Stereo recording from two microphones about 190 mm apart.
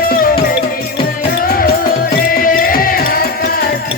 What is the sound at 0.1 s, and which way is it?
Music, 50° left (ahead or behind).